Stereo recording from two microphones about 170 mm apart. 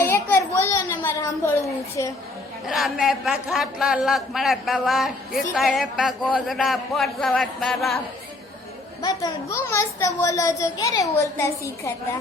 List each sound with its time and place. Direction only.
0.0 s a sound: 15° left (ahead or behind)
2.6 s speech: centre (ahead or behind)
9.0 s a child's voice: 20° left (ahead or behind)